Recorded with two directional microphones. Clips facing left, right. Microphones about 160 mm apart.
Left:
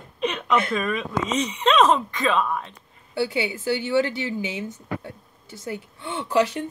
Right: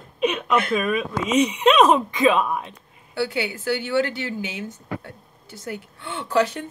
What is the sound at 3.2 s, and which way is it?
Speech, 20° left (ahead or behind).